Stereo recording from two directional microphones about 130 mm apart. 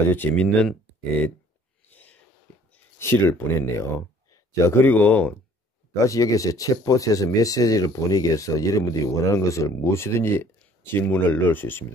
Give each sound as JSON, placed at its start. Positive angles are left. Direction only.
{"t": 0.0, "sound": "speech", "side_deg": 15}
{"t": 1.9, "sound": "a sound", "side_deg": 15}
{"t": 2.7, "sound": "speech", "side_deg": 20}
{"t": 6.0, "sound": "speech", "side_deg": 25}